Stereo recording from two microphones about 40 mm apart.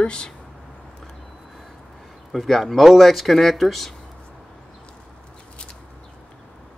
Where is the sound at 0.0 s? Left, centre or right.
Left.